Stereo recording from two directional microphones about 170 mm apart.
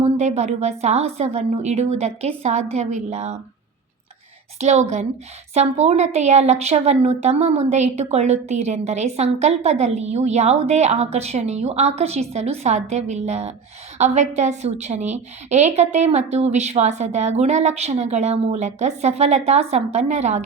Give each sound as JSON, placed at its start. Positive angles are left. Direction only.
{"t": 0.2, "sound": "a woman's voice", "side_deg": -40}
{"t": 4.5, "sound": "a woman's voice", "side_deg": -40}